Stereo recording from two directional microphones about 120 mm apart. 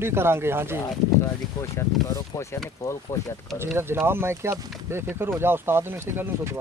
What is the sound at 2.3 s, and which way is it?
Speech, 30° left (ahead or behind).